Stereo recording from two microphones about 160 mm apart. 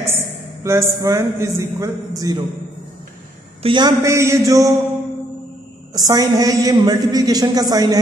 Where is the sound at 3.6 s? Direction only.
25° right (ahead or behind).